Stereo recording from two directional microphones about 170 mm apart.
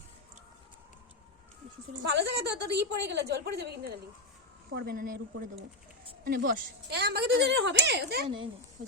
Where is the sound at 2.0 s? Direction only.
90° right.